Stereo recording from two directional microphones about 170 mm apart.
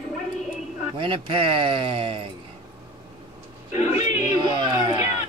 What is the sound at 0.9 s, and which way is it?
Speech, 30° right (ahead or behind).